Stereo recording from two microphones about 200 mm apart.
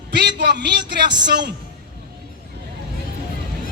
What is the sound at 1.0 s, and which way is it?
Speech, 20° right (ahead or behind).